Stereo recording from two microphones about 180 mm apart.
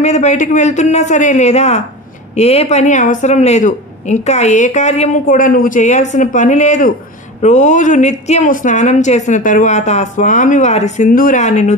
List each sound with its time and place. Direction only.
0.0 s a woman's voice: 40° left (ahead or behind)
5.2 s a woman's voice: 50° left (ahead or behind)